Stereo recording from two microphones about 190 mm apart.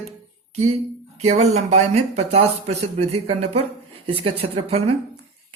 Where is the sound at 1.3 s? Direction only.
35° right (ahead or behind).